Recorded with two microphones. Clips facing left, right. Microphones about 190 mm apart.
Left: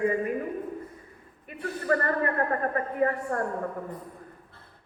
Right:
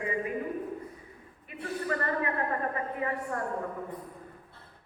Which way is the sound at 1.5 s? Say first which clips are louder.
Left 1 dB; 50° left (ahead or behind).